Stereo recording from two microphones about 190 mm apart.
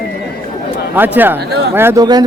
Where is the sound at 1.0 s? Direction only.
10° right (ahead or behind).